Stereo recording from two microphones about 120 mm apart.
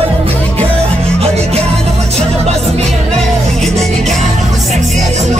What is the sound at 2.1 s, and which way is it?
Music, 65° right (ahead or behind).